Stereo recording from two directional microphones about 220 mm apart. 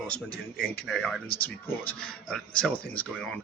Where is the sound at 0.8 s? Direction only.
Centre (ahead or behind).